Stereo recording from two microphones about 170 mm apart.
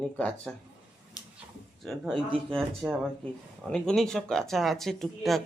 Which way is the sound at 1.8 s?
Centre (ahead or behind).